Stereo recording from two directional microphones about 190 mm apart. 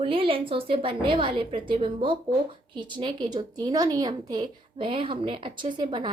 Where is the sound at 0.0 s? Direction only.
30° right (ahead or behind).